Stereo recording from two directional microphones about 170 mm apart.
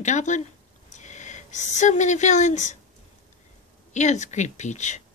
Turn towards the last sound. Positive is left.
turn(degrees=45)  # may be behind; listen again after turning